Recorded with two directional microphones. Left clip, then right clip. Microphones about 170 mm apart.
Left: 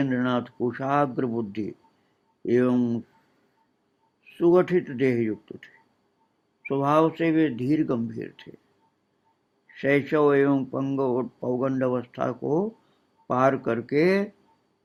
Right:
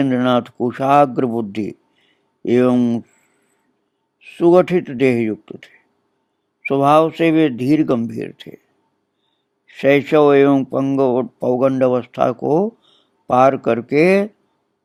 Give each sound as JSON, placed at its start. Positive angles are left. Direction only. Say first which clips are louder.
{"t": 0.0, "sound": "speech", "louder": "right 10 dB", "side_deg": -45}
{"t": 4.2, "sound": "speech", "louder": "right 8 dB", "side_deg": -45}
{"t": 9.6, "sound": "speech", "louder": "right 9 dB", "side_deg": -50}